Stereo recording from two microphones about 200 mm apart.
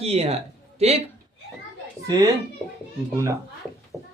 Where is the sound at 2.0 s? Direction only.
15° right (ahead or behind).